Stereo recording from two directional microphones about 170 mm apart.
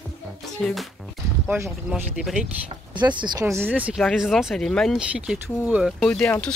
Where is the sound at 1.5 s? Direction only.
10° right (ahead or behind).